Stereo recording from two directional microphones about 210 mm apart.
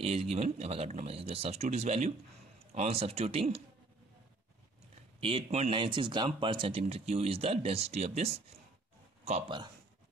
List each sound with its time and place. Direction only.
0.0 s speech: 30° right (ahead or behind)
5.2 s speech: 30° right (ahead or behind)